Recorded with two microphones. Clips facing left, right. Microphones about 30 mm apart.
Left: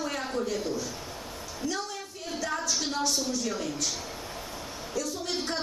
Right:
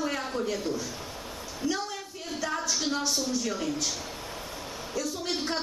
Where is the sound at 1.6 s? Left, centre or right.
Centre.